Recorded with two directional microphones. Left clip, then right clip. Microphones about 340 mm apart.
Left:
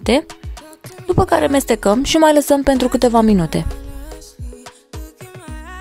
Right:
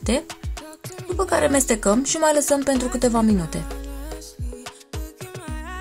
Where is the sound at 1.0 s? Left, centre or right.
Left.